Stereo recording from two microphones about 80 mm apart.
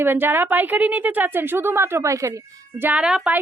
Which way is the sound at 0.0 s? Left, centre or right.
Right.